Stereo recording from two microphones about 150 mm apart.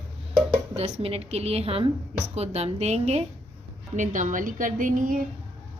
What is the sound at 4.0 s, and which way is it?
A woman's voice, 55° right (ahead or behind).